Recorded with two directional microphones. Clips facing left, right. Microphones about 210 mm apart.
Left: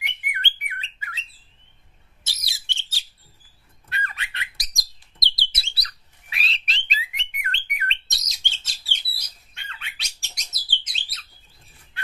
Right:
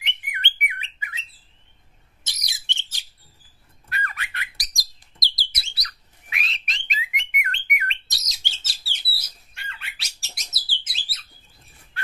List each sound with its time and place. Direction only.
0.0 s bird: 20° right (ahead or behind)
2.2 s bird: 20° right (ahead or behind)
3.9 s bird: 25° left (ahead or behind)
8.3 s bird: 5° right (ahead or behind)